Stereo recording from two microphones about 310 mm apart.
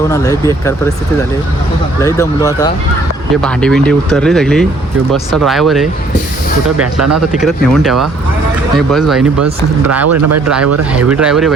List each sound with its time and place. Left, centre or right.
2.0 s speech: centre
6.9 s speech: centre
9.9 s speech: right
10.9 s speech: centre